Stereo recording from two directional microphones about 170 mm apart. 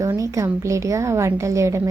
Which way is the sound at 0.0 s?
20° right (ahead or behind).